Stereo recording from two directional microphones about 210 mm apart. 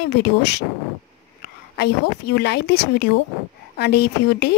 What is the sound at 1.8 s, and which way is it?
A woman's voice, 50° left (ahead or behind).